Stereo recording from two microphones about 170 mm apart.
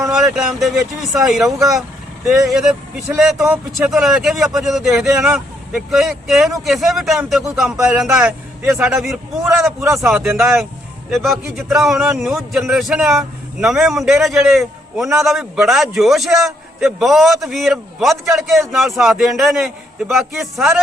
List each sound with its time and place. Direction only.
0.3 s a man's voice: centre (ahead or behind)
1.5 s speech: 20° right (ahead or behind)
2.5 s a man's voice: 5° right (ahead or behind)
9.8 s speech: 15° right (ahead or behind)
11.1 s a man's voice: centre (ahead or behind)